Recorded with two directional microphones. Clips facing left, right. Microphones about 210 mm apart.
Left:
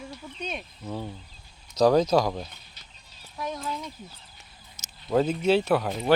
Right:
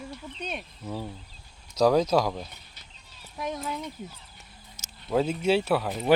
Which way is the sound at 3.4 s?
15° right (ahead or behind).